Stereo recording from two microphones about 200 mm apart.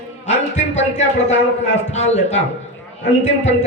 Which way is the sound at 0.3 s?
35° left (ahead or behind).